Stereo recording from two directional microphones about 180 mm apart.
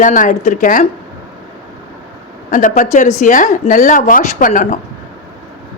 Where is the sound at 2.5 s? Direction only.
45° left (ahead or behind).